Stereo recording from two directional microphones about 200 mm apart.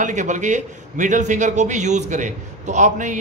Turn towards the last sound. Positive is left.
turn(degrees=-40)  # may be behind; listen again after turning